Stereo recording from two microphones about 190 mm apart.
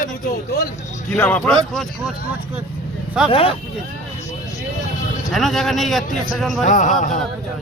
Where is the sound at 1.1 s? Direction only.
10° left (ahead or behind).